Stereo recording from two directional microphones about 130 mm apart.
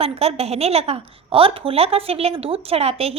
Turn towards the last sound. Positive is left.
turn(degrees=-50)  # may be behind; listen again after turning